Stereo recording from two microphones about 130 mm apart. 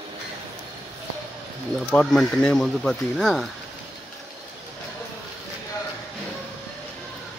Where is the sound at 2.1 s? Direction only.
5° left (ahead or behind).